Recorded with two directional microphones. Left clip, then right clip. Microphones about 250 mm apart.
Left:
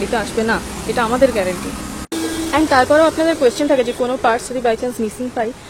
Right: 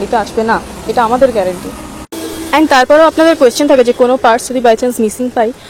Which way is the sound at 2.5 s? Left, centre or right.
Right.